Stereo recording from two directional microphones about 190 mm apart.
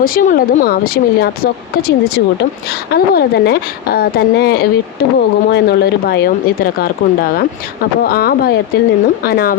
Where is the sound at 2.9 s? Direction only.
55° left (ahead or behind).